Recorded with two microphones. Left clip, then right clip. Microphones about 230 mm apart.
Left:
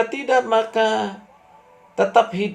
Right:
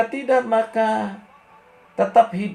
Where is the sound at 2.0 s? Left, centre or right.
Left.